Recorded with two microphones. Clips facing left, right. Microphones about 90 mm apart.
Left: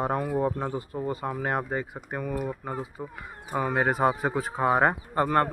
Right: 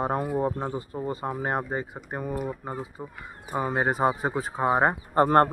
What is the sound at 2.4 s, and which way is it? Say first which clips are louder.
Speech: even; 15° right (ahead or behind).